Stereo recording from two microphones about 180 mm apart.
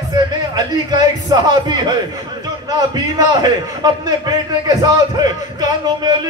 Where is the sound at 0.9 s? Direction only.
25° right (ahead or behind).